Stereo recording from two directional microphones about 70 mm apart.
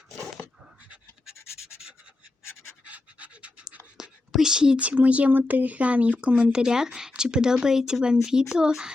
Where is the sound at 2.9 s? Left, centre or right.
Centre.